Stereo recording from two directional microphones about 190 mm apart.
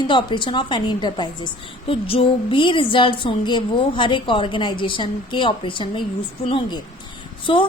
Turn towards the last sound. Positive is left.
turn(degrees=25)  # may be behind; listen again after turning